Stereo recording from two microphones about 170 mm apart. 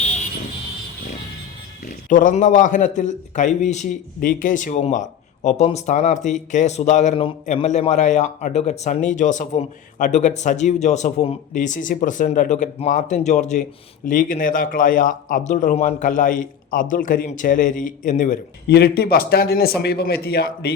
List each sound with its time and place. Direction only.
1.9 s a man's voice: 50° left (ahead or behind)
18.7 s a man's voice: 70° left (ahead or behind)